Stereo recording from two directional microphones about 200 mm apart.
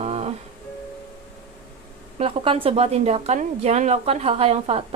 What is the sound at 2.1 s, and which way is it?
A woman's voice, 30° right (ahead or behind).